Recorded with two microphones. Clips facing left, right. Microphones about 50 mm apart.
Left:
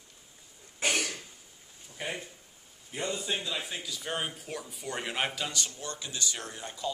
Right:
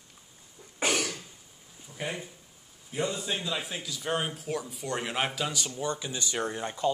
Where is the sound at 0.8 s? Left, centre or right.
Centre.